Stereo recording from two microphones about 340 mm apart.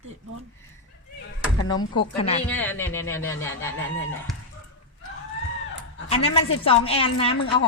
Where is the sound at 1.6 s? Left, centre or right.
Centre.